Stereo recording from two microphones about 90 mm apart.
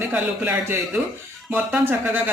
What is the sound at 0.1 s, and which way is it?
Speech, 20° right (ahead or behind).